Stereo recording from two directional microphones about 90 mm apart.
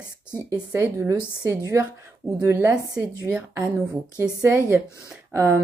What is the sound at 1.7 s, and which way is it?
A woman's voice, 30° right (ahead or behind).